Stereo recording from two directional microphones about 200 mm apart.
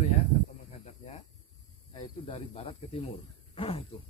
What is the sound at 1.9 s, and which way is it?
Speech, 25° left (ahead or behind).